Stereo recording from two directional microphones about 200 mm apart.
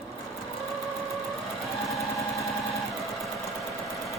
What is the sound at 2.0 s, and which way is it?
Engine, centre (ahead or behind).